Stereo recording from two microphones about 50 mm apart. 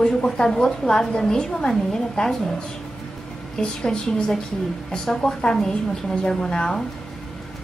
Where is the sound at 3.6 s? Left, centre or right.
Centre.